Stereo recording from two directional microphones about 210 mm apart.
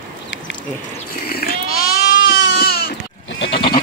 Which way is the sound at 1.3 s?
45° left (ahead or behind).